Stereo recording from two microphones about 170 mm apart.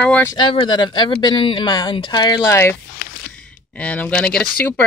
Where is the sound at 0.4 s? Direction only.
30° left (ahead or behind).